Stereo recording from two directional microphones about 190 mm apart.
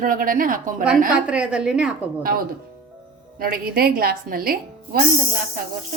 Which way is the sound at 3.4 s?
50° right (ahead or behind).